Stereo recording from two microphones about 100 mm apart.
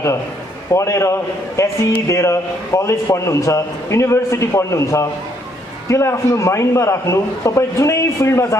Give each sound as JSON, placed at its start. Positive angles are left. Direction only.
{"t": 0.7, "sound": "a man's voice", "side_deg": 30}